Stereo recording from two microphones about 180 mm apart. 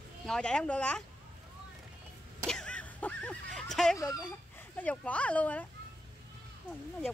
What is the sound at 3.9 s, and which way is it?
Speech, 20° left (ahead or behind).